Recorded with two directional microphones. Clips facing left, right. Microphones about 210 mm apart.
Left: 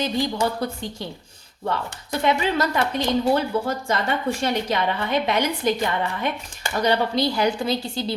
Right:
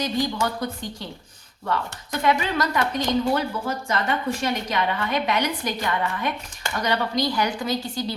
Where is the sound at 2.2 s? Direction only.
25° left (ahead or behind).